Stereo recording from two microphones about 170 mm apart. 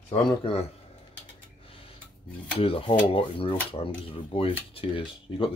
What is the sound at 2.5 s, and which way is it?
Speech, 35° left (ahead or behind).